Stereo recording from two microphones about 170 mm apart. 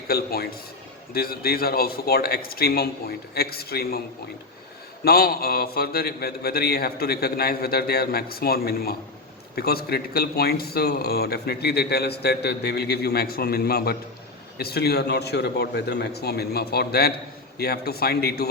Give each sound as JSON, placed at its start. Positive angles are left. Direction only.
{"t": 0.1, "sound": "a man's voice", "side_deg": 65}
{"t": 5.0, "sound": "a man's voice", "side_deg": 65}